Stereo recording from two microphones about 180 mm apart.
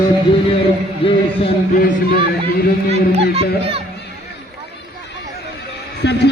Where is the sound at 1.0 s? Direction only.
30° left (ahead or behind).